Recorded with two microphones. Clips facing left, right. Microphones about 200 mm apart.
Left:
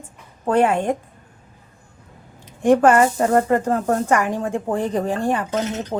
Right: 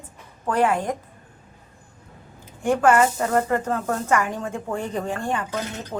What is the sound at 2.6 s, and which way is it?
Speech, 35° left (ahead or behind).